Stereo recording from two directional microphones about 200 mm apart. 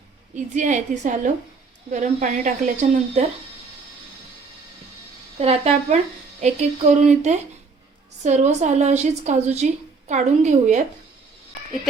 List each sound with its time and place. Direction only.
0.3 s a woman's voice: 40° right (ahead or behind)
5.4 s a woman's voice: 30° right (ahead or behind)